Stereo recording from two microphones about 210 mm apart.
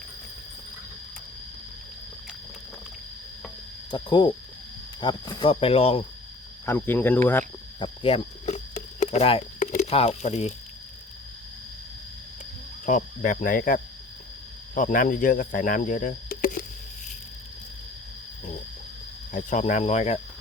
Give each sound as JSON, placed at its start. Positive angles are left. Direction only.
{"t": 3.9, "sound": "speech", "side_deg": 20}
{"t": 6.7, "sound": "speech", "side_deg": 10}
{"t": 7.8, "sound": "cricket", "side_deg": 25}
{"t": 9.7, "sound": "speech", "side_deg": 30}
{"t": 12.8, "sound": "speech", "side_deg": 40}
{"t": 19.3, "sound": "speech", "side_deg": 35}